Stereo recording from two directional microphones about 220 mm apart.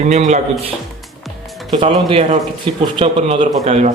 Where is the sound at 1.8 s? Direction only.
25° right (ahead or behind).